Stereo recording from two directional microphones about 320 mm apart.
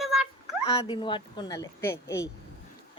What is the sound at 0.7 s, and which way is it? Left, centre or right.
Speech, centre.